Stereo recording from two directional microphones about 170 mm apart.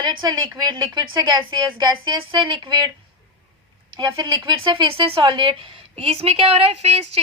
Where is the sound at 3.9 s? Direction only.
25° right (ahead or behind).